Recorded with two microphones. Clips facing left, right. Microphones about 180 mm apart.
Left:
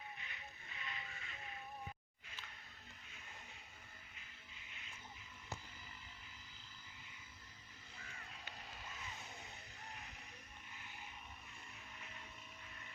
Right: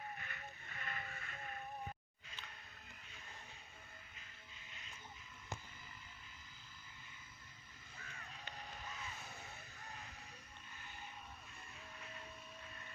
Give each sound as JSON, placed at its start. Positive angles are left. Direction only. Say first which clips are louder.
{"t": 0.2, "sound": "music", "louder": "right 3 dB", "side_deg": -50}